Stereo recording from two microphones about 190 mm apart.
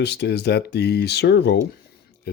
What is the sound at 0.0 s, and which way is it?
Speech, 60° left (ahead or behind).